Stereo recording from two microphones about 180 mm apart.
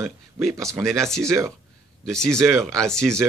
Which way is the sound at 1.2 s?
15° right (ahead or behind).